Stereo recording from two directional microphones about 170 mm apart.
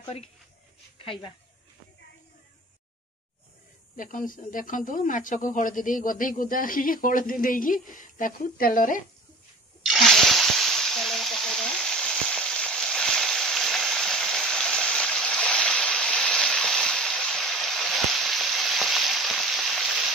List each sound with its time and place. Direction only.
0.9 s speech: 30° left (ahead or behind)
3.9 s speech: 50° left (ahead or behind)
9.8 s a sound: centre (ahead or behind)